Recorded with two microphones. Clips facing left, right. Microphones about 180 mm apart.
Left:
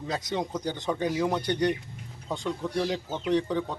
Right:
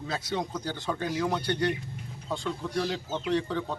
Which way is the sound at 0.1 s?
15° left (ahead or behind).